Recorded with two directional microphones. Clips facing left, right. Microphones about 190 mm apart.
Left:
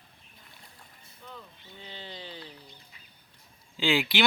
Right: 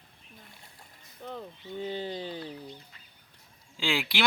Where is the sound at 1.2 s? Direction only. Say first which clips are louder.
Right 8 dB; 45° right (ahead or behind).